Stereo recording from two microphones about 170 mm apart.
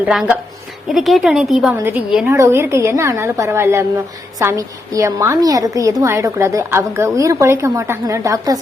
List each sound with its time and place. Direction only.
0.0 s a woman's voice: 5° right (ahead or behind)
1.7 s a woman's voice: 10° right (ahead or behind)